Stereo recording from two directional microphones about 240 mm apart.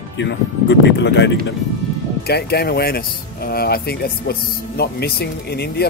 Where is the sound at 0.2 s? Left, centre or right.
Left.